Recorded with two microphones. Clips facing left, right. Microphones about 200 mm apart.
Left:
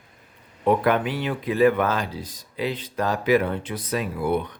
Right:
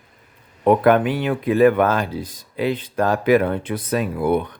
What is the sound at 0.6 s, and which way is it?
Speech, 55° right (ahead or behind).